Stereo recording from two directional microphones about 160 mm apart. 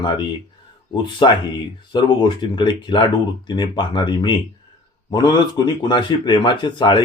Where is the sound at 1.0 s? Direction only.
30° left (ahead or behind).